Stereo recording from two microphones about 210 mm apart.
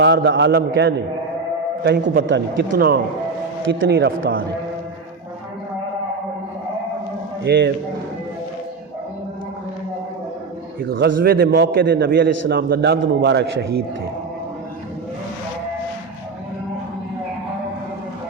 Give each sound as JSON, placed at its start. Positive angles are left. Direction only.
{"t": 0.0, "sound": "a man's voice", "side_deg": -55}
{"t": 2.7, "sound": "a man's voice", "side_deg": -45}
{"t": 3.7, "sound": "a man's voice", "side_deg": -60}
{"t": 7.4, "sound": "a man's voice", "side_deg": -50}
{"t": 10.8, "sound": "a man's voice", "side_deg": -45}